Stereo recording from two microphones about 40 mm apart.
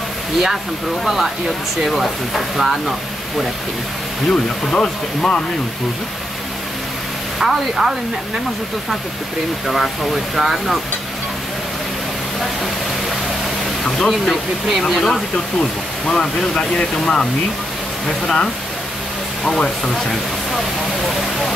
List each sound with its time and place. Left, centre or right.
1.0 s speech: centre
4.3 s speech: centre
7.3 s speech: centre
9.7 s speech: centre
13.8 s speech: centre